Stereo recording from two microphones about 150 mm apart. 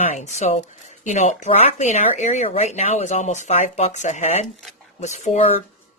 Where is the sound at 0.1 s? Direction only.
50° left (ahead or behind).